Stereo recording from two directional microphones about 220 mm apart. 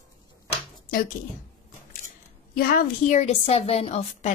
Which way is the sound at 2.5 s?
40° left (ahead or behind).